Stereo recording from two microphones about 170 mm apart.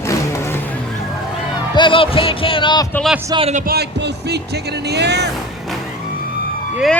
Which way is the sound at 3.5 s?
65° right (ahead or behind).